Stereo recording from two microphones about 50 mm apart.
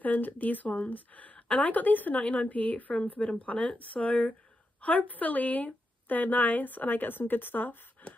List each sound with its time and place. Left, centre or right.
0.0 s a woman's voice: left